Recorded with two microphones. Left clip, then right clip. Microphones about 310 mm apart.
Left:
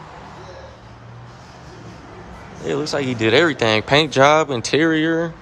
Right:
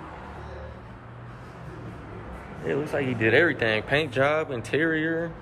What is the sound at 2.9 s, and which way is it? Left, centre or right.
Speech, centre.